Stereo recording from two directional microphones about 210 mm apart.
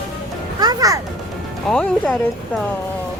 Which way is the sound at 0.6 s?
15° right (ahead or behind).